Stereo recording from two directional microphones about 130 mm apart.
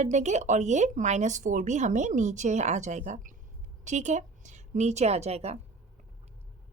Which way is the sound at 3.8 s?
65° right (ahead or behind).